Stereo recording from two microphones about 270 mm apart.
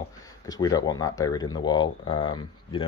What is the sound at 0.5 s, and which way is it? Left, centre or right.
Speech, centre.